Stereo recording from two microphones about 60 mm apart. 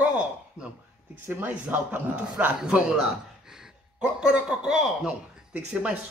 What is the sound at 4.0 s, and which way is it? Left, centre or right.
A man's voice, centre.